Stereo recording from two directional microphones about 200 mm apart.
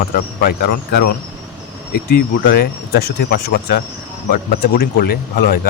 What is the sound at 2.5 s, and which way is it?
Speech, 55° left (ahead or behind).